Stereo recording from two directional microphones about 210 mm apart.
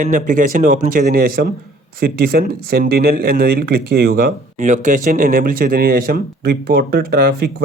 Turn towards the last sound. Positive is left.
turn(degrees=-50)  # may be behind; listen again after turning